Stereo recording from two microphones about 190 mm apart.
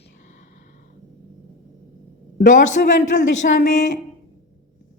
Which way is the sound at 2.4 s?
45° left (ahead or behind).